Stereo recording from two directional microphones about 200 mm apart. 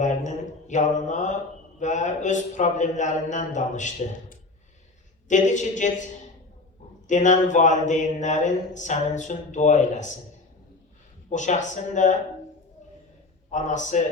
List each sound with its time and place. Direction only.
0.0 s speech: 35° left (ahead or behind)
7.1 s speech: 40° left (ahead or behind)
11.3 s speech: 35° left (ahead or behind)
13.5 s speech: 40° left (ahead or behind)